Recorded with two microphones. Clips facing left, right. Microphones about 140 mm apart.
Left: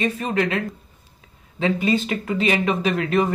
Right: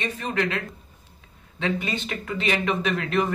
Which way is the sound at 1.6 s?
Centre (ahead or behind).